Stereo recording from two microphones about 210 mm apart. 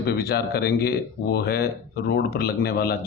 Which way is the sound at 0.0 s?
50° left (ahead or behind).